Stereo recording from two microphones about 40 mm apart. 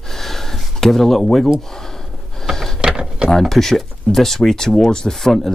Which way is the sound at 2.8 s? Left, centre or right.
Right.